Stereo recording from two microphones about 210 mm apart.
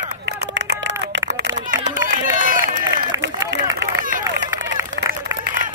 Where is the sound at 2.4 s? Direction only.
40° right (ahead or behind).